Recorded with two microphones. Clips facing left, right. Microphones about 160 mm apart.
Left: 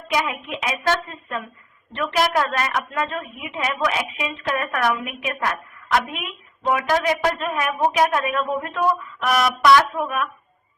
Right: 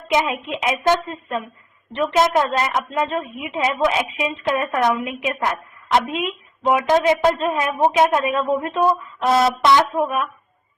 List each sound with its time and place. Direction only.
0.1 s a woman's voice: 20° right (ahead or behind)